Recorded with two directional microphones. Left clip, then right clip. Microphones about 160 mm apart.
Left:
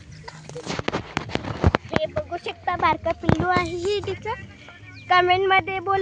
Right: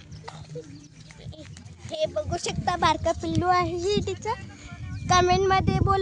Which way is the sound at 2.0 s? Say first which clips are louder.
Left 1 dB; 25° right (ahead or behind).